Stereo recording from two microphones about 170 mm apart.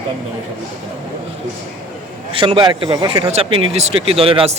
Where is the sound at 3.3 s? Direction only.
35° right (ahead or behind).